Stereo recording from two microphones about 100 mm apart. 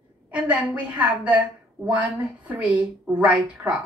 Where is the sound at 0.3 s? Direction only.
15° right (ahead or behind).